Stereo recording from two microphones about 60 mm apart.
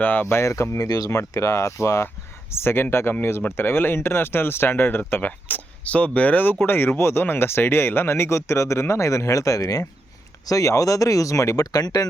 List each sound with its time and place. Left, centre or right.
0.0 s speech: left
0.3 s speech: left
0.9 s speech: left
10.4 s speech: left